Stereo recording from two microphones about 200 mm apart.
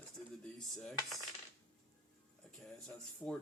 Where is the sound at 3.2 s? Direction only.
5° left (ahead or behind).